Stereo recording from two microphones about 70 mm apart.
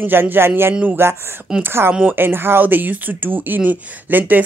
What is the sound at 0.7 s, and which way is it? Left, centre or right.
Speech, centre.